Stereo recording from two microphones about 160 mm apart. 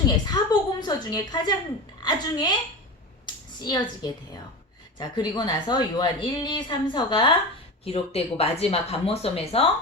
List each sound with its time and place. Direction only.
0.3 s a woman's voice: 25° left (ahead or behind)
3.6 s a woman's voice: 25° left (ahead or behind)